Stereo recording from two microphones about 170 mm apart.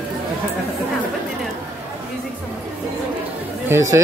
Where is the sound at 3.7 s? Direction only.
15° right (ahead or behind).